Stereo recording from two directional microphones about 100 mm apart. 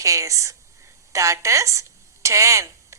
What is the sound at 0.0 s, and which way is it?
A woman's voice, 35° right (ahead or behind).